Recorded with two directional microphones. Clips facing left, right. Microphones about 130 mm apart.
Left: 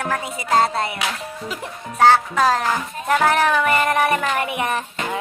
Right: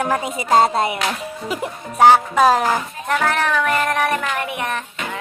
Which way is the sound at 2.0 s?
15° right (ahead or behind).